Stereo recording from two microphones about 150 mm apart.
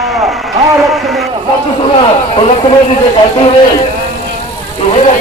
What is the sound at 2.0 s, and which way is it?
Speech, 35° left (ahead or behind).